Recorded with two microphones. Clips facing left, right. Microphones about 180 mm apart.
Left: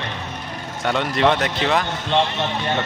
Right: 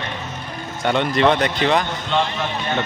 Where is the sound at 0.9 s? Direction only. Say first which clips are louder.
Right 2 dB; centre (ahead or behind).